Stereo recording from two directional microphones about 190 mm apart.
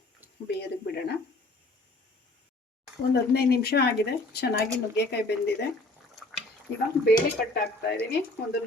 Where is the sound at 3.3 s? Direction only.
60° left (ahead or behind).